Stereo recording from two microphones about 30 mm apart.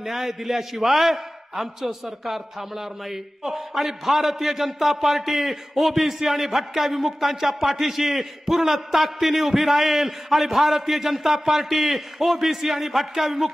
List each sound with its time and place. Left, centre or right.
0.0 s a man's voice: centre